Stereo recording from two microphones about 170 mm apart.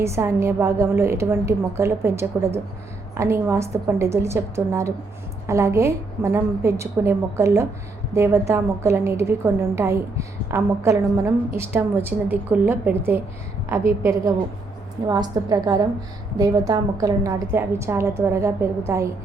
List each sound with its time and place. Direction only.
0.0 s a woman's voice: 15° right (ahead or behind)